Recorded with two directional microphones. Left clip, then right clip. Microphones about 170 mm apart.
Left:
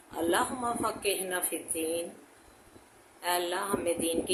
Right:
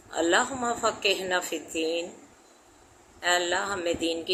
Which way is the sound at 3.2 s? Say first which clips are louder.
Right 5 dB; 45° right (ahead or behind).